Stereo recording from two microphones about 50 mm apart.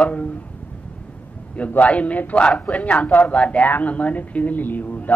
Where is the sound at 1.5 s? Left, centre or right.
Left.